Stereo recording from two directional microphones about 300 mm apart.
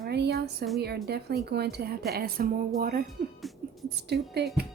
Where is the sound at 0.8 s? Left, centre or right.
Right.